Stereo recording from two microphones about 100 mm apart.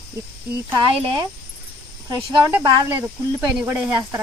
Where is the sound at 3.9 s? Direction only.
30° right (ahead or behind).